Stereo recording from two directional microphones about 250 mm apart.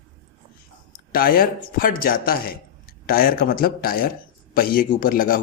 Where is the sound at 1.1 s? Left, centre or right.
Left.